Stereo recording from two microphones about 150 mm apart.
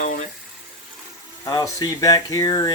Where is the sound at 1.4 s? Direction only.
25° left (ahead or behind).